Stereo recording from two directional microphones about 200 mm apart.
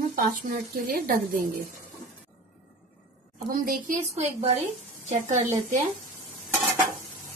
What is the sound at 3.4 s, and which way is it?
A woman's voice, 45° right (ahead or behind).